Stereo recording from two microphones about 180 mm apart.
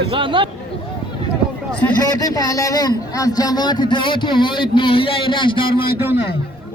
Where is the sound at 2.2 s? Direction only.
20° left (ahead or behind).